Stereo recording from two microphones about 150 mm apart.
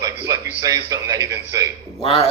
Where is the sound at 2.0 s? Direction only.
40° left (ahead or behind).